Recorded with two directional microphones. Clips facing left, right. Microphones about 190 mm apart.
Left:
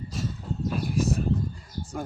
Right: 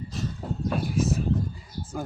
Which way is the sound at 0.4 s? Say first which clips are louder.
Right 1 dB; 65° right (ahead or behind).